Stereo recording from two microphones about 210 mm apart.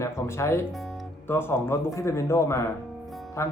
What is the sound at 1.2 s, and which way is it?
Speech, 10° left (ahead or behind).